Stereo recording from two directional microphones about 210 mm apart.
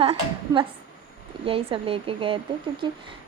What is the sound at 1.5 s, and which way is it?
Speech, 25° right (ahead or behind).